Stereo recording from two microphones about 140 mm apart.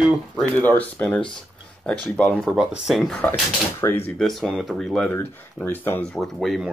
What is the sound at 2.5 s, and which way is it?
Speech, 5° right (ahead or behind).